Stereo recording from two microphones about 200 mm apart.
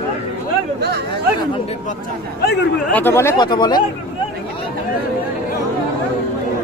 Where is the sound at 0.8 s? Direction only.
55° right (ahead or behind).